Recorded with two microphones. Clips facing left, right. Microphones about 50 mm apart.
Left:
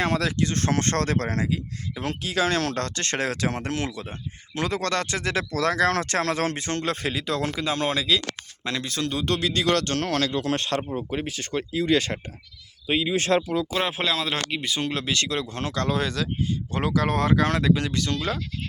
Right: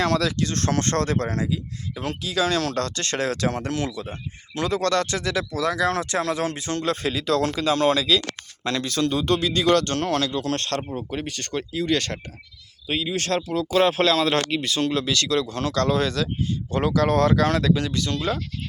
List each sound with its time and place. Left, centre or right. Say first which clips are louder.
0.0 s speech: right 2 dB; left
5.5 s speech: left 2 dB; left
16.8 s speech: right 4 dB; centre
17.7 s speech: right 1 dB; left